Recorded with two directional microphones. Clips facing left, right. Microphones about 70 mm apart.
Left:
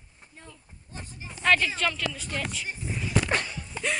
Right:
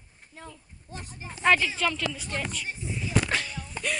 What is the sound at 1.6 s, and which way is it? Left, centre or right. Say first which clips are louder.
Speech: even; centre.